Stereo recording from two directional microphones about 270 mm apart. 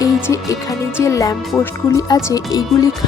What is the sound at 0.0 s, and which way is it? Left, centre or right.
Speech, centre.